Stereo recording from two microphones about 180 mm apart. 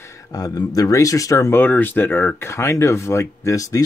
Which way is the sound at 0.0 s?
15° left (ahead or behind).